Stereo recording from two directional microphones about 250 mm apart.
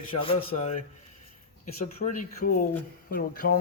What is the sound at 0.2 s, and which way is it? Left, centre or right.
A man's voice, left.